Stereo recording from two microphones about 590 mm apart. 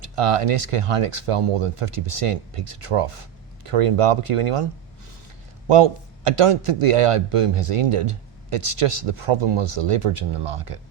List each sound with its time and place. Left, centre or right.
0.0 s a man's voice: right